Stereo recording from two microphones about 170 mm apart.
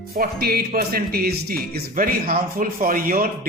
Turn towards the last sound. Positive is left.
turn(degrees=-55)  # may be behind; listen again after turning